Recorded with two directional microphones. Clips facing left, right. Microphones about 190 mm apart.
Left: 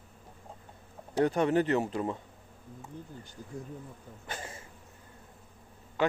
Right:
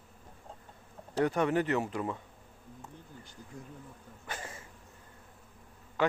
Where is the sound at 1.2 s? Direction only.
30° left (ahead or behind).